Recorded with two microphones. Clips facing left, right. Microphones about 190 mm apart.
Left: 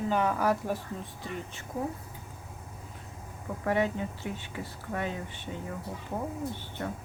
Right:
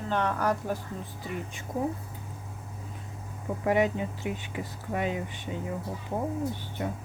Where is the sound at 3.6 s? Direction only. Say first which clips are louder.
Right 3 dB; 15° right (ahead or behind).